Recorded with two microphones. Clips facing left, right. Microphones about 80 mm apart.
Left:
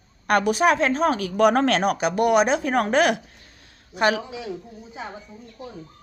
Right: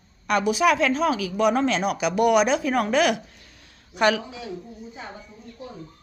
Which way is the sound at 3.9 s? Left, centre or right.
Left.